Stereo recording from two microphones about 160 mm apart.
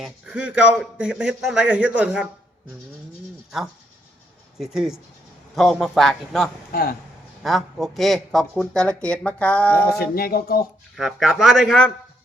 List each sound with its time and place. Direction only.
0.0 s a man's voice: 5° right (ahead or behind)
4.5 s speech: 5° right (ahead or behind)
6.7 s speech: 65° left (ahead or behind)
7.4 s speech: centre (ahead or behind)
10.0 s speech: 70° left (ahead or behind)
10.9 s speech: centre (ahead or behind)